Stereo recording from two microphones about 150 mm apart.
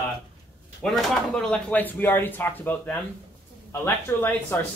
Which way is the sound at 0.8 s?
Centre (ahead or behind).